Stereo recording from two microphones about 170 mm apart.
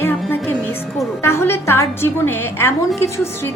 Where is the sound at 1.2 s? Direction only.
15° left (ahead or behind).